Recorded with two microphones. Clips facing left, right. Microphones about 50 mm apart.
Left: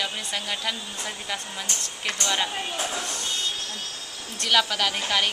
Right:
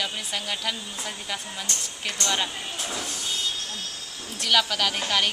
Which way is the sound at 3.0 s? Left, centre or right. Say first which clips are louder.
Left 2 dB; centre.